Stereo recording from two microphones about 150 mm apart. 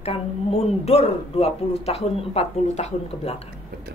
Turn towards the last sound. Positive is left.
turn(degrees=45)  # may be behind; listen again after turning